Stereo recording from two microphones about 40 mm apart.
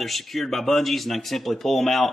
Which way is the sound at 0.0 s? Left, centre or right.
Centre.